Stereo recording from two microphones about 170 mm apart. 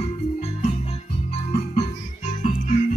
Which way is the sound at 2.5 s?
45° left (ahead or behind).